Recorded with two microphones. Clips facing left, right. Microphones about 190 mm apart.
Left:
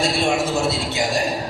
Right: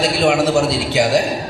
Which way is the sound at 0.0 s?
65° right (ahead or behind).